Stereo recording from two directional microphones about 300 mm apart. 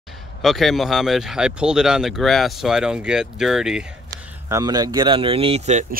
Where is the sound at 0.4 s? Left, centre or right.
Centre.